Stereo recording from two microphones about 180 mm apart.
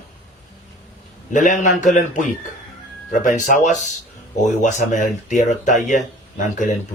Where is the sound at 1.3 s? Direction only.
45° left (ahead or behind).